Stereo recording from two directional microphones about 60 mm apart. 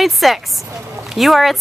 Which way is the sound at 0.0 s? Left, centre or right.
Centre.